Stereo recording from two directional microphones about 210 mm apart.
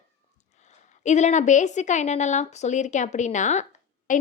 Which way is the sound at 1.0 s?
35° left (ahead or behind).